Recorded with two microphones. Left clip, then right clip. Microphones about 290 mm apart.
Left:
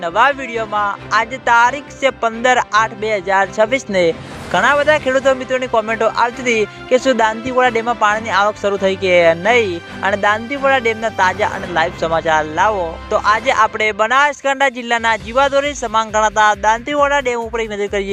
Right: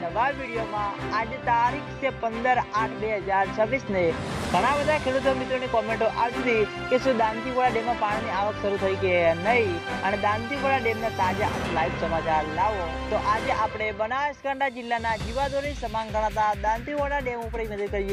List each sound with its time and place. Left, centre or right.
1.1 s speech: left